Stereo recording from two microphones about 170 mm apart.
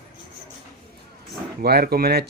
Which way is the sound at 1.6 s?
65° right (ahead or behind).